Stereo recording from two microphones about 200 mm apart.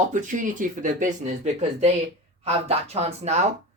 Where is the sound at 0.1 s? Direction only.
40° right (ahead or behind).